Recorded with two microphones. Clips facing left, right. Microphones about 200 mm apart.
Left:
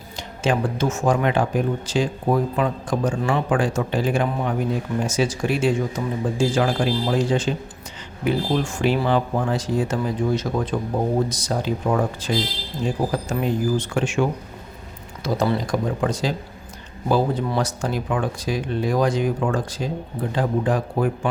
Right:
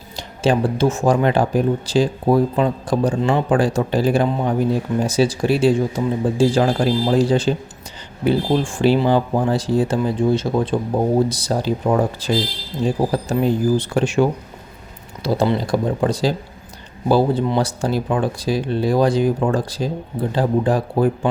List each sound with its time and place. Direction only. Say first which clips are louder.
0.2 s speech: right 4 dB; 35° right (ahead or behind)
3.2 s speech: right 4 dB; 25° right (ahead or behind)
3.5 s speech: right 4 dB; 35° right (ahead or behind)